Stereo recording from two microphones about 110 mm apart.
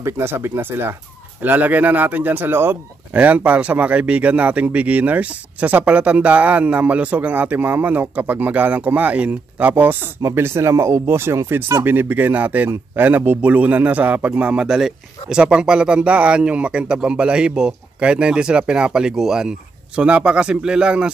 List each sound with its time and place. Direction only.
0.0 s speech: 20° right (ahead or behind)